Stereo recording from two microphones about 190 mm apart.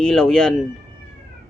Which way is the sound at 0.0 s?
Centre (ahead or behind).